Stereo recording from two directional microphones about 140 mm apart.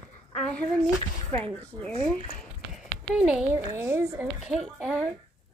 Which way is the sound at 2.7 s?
5° right (ahead or behind).